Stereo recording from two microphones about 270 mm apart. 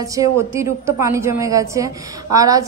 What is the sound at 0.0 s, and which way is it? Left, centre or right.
A woman's voice, centre.